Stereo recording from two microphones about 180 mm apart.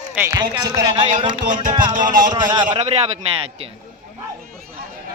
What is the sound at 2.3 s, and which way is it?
Speech, 25° right (ahead or behind).